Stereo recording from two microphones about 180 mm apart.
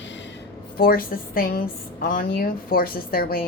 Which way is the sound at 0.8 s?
55° left (ahead or behind).